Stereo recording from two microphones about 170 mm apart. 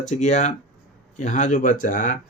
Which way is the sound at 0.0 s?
45° left (ahead or behind).